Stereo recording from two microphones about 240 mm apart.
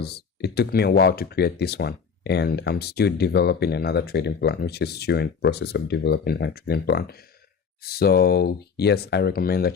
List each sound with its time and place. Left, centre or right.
0.0 s speech: left